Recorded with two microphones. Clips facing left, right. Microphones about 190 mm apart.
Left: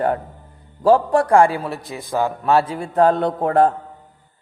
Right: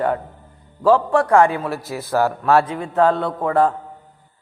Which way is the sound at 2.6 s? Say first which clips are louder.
Left 1 dB; 35° left (ahead or behind).